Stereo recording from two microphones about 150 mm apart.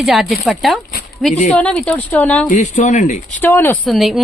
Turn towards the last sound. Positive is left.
turn(degrees=0)  # may be behind; listen again after turning